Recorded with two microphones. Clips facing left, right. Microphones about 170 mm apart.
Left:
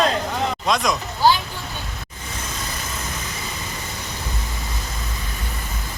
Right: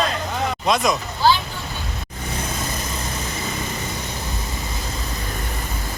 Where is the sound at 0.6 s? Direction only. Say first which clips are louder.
Right 3 dB; 5° right (ahead or behind).